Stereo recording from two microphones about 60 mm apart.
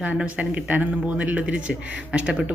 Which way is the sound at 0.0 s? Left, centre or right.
Right.